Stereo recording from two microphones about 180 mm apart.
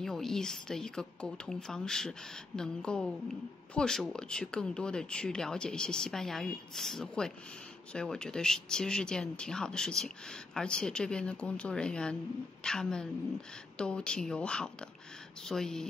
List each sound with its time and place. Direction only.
0.0 s a woman's voice: centre (ahead or behind)